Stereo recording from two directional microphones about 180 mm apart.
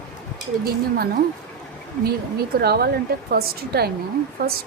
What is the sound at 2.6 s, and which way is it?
A woman's voice, 60° right (ahead or behind).